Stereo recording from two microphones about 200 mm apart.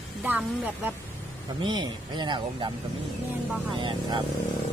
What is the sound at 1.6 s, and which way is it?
Speech, 20° right (ahead or behind).